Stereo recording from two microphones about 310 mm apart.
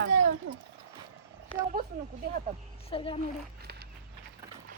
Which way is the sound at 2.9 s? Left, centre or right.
Centre.